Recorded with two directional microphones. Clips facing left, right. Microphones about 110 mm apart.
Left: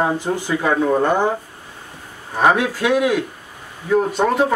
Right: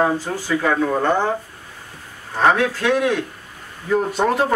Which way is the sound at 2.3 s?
10° left (ahead or behind).